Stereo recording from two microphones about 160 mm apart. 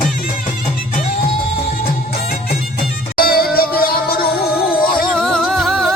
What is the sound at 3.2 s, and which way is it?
Music, 65° left (ahead or behind).